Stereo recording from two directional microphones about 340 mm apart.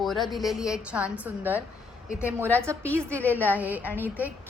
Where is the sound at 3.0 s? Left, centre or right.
Centre.